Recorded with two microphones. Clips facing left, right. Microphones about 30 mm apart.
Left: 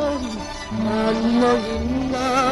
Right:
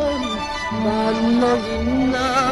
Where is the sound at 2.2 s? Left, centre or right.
Right.